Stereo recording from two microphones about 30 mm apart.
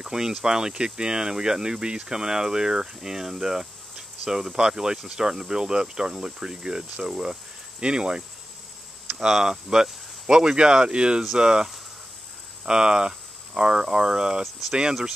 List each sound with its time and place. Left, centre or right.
0.0 s speech: right
4.6 s speech: right
9.3 s speech: centre